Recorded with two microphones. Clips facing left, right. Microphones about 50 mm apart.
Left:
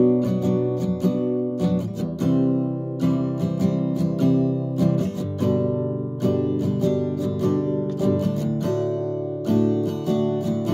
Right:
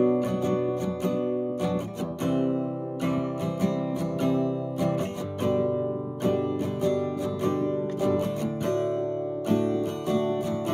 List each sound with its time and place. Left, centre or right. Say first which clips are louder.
0.0 s music: left 4 dB; right